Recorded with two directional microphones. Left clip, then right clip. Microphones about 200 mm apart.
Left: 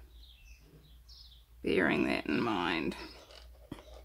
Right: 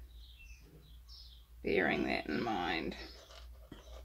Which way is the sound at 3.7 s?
40° left (ahead or behind).